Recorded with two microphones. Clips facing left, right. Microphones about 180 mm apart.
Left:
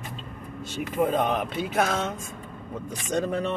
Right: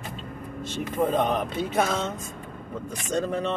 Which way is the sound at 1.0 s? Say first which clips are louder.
Even; 10° left (ahead or behind).